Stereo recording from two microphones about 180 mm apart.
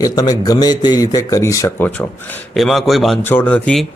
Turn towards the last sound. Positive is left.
turn(degrees=5)  # may be behind; listen again after turning